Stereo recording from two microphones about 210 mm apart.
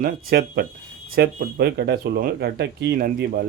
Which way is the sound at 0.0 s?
45° right (ahead or behind).